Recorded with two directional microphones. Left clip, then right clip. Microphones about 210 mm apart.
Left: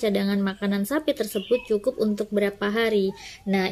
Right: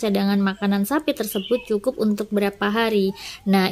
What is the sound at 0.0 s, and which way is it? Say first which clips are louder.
Speech: right 2 dB; 20° right (ahead or behind).